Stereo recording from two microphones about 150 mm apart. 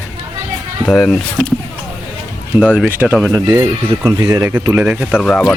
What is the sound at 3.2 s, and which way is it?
Speech, 15° right (ahead or behind).